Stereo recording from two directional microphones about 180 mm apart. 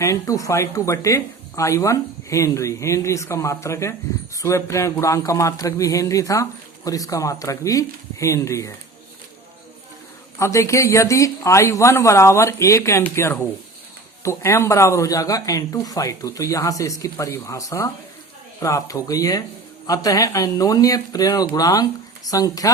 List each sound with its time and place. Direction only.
0.0 s speech: 15° left (ahead or behind)
10.3 s speech: 15° left (ahead or behind)